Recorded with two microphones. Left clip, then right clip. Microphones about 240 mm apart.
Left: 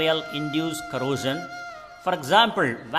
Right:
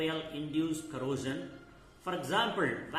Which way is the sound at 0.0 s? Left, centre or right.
Left.